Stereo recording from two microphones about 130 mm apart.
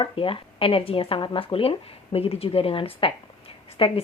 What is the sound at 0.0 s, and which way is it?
A woman's voice, 40° left (ahead or behind).